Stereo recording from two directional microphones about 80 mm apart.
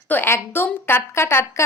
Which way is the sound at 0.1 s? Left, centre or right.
Left.